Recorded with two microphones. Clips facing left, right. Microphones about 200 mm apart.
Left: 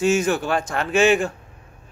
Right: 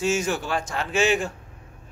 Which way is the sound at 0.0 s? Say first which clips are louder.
Left 5 dB; 55° left (ahead or behind).